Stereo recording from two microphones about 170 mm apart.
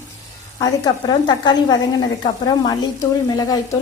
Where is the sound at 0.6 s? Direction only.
20° left (ahead or behind).